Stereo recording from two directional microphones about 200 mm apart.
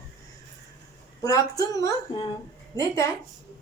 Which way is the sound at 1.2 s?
15° left (ahead or behind).